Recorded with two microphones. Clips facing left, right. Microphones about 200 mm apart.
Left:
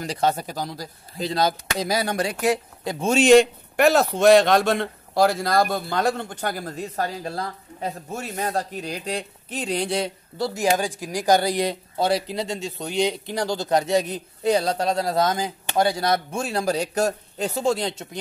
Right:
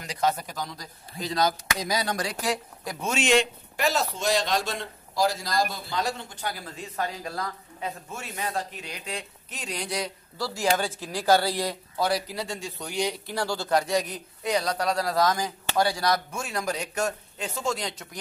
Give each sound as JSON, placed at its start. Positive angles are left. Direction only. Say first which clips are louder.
{"t": 0.0, "sound": "speech", "louder": "left 4 dB", "side_deg": 30}
{"t": 3.7, "sound": "speech", "louder": "left 9 dB", "side_deg": 60}